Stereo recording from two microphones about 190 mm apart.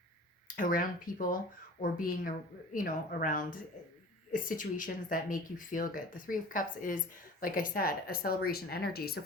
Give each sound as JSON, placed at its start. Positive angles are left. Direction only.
{"t": 0.4, "sound": "speech", "side_deg": 45}